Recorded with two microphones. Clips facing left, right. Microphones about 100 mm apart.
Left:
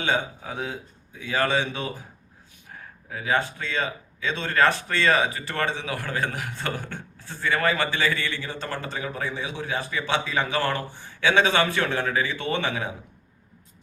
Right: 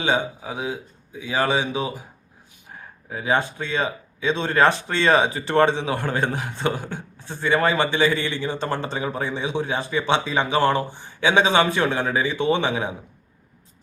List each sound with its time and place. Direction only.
0.0 s speech: 15° right (ahead or behind)